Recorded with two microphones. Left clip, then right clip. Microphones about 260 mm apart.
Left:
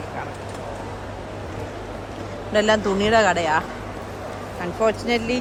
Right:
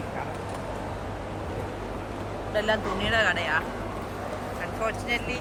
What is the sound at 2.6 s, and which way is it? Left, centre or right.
Speech, left.